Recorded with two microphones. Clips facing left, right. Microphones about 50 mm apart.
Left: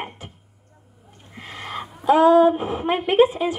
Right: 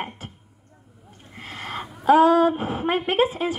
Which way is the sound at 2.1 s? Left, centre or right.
Right.